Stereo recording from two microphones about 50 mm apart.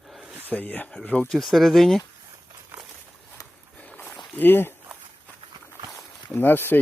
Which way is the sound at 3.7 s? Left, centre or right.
Left.